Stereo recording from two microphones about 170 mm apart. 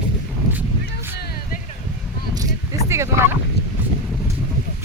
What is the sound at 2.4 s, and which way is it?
Bow-wow, 20° right (ahead or behind).